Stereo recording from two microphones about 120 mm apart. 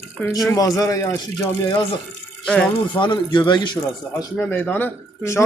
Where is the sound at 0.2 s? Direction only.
15° left (ahead or behind).